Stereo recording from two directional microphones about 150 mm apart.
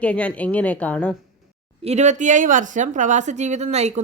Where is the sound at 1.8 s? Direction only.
50° right (ahead or behind).